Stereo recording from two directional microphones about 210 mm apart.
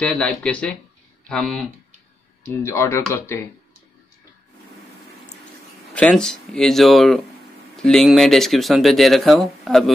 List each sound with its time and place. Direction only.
0.0 s speech: 5° left (ahead or behind)
2.6 s speech: 10° left (ahead or behind)
5.9 s speech: 5° left (ahead or behind)